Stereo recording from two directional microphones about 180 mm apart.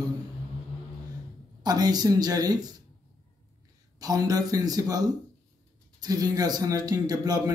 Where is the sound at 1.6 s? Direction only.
20° right (ahead or behind).